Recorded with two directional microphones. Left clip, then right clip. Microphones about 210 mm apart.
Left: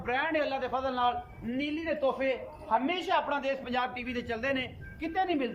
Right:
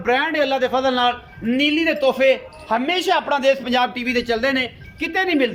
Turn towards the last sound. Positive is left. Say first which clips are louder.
# right 11 dB
turn(degrees=-35)  # may be behind; listen again after turning